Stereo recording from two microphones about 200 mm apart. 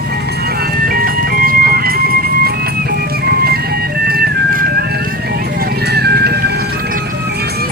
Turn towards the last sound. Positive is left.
turn(degrees=-55)  # may be behind; listen again after turning